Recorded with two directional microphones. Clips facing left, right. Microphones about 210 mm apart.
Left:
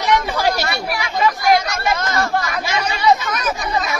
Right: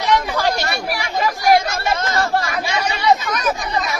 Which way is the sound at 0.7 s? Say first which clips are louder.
Even; 35° right (ahead or behind).